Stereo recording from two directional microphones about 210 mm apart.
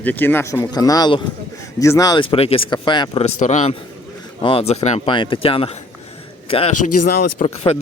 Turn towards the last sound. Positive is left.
turn(degrees=40)  # may be behind; listen again after turning